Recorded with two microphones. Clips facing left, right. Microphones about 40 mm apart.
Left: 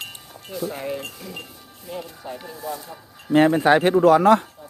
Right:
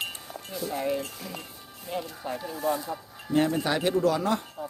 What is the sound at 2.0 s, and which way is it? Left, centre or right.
Speech, centre.